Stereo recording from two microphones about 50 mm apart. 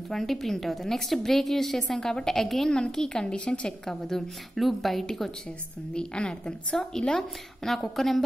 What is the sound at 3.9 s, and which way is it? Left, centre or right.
A woman's voice, centre.